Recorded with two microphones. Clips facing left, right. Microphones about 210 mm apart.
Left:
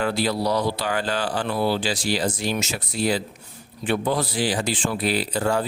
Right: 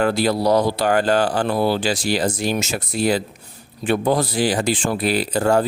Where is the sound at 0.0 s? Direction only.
45° right (ahead or behind).